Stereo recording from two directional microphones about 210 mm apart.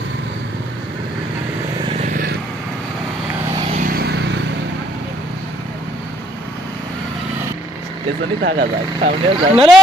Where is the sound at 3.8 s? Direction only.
45° right (ahead or behind).